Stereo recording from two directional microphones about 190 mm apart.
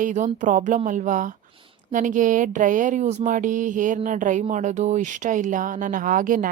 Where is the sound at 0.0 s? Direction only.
40° right (ahead or behind).